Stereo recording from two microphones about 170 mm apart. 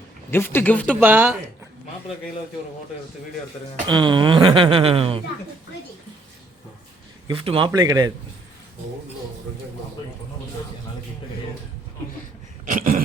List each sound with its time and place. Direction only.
0.3 s speech: 15° left (ahead or behind)
1.0 s speech: 10° right (ahead or behind)
3.8 s speech: 25° right (ahead or behind)
7.3 s speech: 30° right (ahead or behind)
7.7 s a man's voice: 20° right (ahead or behind)
12.6 s a sound: 55° right (ahead or behind)